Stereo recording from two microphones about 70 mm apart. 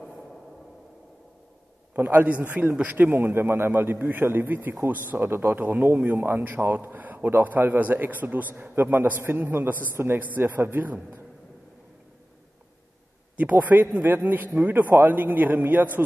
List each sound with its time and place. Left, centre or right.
2.0 s a man's voice: right
3.1 s a man's voice: right
13.4 s a man's voice: right